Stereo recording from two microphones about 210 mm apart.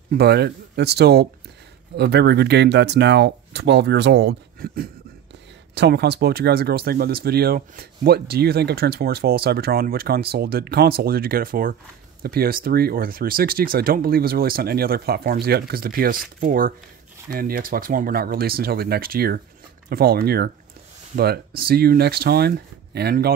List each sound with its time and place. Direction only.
0.1 s speech: 50° right (ahead or behind)